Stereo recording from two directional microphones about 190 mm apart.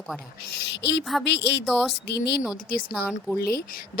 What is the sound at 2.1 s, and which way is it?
Speech, 60° left (ahead or behind).